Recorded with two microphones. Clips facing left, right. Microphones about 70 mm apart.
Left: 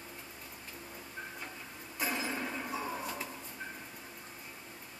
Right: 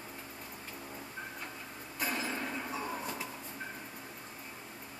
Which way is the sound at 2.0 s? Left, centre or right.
Centre.